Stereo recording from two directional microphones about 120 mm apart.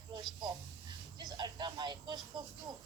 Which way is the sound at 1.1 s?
35° right (ahead or behind).